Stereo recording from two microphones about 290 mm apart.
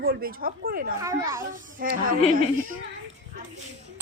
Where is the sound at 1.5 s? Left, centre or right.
Right.